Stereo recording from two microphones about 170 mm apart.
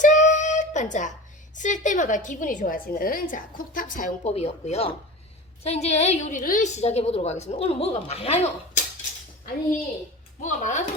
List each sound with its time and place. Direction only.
0.0 s child singing: 45° left (ahead or behind)
1.5 s a woman's voice: 45° left (ahead or behind)
10.4 s a woman's voice: 45° left (ahead or behind)